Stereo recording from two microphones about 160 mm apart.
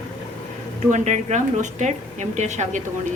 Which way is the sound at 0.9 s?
50° right (ahead or behind).